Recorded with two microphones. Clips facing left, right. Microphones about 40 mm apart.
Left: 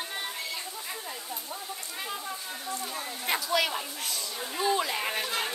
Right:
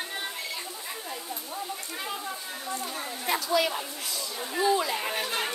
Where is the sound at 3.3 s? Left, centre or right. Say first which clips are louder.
Right 2 dB; left.